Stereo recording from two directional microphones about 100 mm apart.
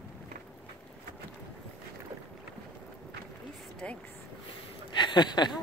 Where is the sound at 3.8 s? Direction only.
10° left (ahead or behind).